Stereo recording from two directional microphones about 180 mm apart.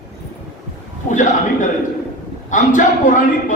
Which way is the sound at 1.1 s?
45° left (ahead or behind).